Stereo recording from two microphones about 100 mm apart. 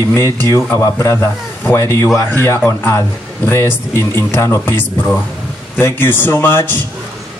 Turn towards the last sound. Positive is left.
turn(degrees=20)  # may be behind; listen again after turning